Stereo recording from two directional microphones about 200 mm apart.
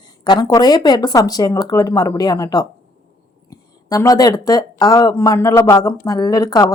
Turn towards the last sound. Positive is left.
turn(degrees=20)  # may be behind; listen again after turning